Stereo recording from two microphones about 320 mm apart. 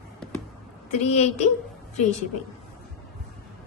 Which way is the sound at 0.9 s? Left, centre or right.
Left.